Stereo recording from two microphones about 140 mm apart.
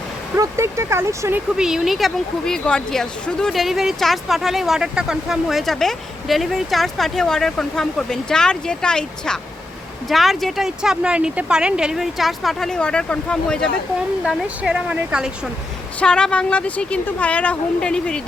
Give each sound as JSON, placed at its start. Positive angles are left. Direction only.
{"t": 0.3, "sound": "speech", "side_deg": -20}
{"t": 1.5, "sound": "speech", "side_deg": -5}
{"t": 14.3, "sound": "speech", "side_deg": -5}
{"t": 16.0, "sound": "a woman's voice", "side_deg": 5}